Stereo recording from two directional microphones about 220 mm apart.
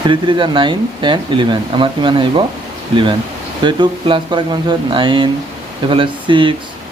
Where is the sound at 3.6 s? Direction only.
20° right (ahead or behind).